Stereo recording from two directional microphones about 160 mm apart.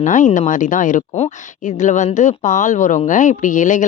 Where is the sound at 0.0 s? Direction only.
50° left (ahead or behind).